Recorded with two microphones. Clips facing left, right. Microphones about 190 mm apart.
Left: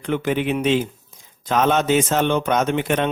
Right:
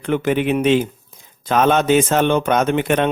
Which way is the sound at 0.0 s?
55° right (ahead or behind).